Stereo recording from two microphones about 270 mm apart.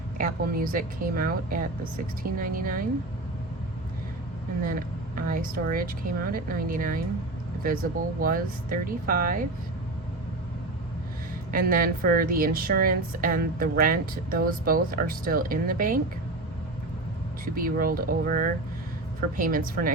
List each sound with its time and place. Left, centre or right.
0.2 s a woman's voice: right
5.2 s a woman's voice: right
11.5 s a woman's voice: right
17.5 s a woman's voice: right